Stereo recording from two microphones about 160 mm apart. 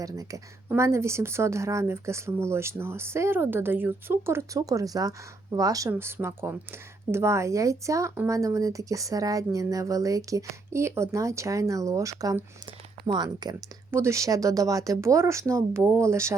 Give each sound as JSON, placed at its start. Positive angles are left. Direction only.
{"t": 0.0, "sound": "speech", "side_deg": -20}